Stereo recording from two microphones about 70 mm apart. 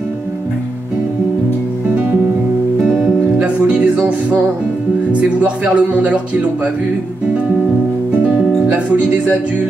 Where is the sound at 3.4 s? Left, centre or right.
Centre.